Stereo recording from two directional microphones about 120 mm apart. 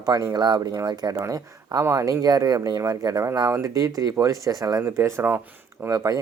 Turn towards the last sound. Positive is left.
turn(degrees=-25)  # may be behind; listen again after turning